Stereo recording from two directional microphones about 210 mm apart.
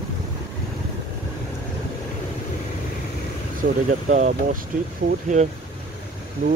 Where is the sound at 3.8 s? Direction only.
35° right (ahead or behind).